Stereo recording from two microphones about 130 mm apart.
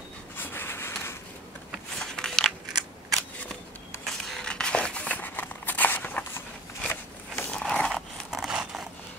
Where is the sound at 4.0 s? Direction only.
5° left (ahead or behind).